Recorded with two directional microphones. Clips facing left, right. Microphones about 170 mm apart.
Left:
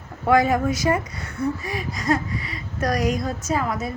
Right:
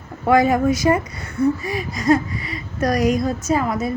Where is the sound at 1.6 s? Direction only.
5° right (ahead or behind).